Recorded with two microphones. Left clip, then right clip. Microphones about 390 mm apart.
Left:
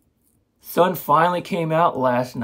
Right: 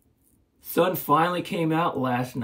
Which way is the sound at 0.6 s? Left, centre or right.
Centre.